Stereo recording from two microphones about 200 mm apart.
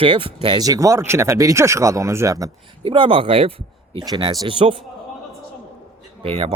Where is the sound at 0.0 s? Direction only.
25° right (ahead or behind).